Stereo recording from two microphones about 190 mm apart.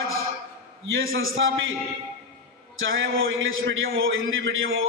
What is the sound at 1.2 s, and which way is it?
Speech, 90° right.